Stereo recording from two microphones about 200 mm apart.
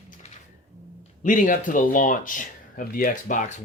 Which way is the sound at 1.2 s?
40° left (ahead or behind).